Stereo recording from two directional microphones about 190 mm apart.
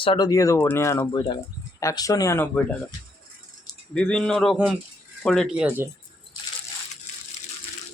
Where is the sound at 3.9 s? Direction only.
5° left (ahead or behind).